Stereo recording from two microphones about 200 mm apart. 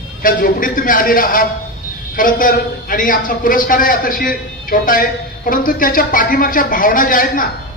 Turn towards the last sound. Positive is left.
turn(degrees=45)  # may be behind; listen again after turning